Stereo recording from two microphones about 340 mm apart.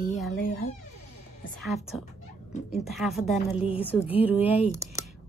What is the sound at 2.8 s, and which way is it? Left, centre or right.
Speech, centre.